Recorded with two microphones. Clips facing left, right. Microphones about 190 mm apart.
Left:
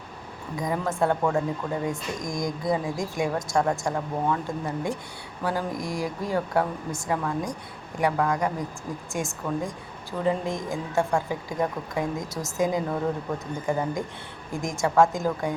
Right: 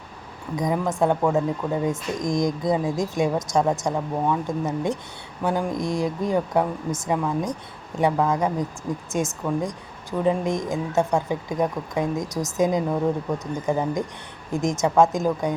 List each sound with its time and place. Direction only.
0.5 s a woman's voice: 15° right (ahead or behind)